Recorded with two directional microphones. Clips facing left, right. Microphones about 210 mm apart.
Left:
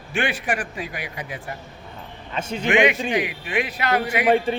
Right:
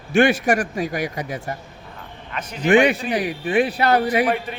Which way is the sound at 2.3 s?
25° left (ahead or behind).